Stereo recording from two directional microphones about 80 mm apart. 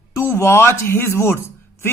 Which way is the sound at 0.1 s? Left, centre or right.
Left.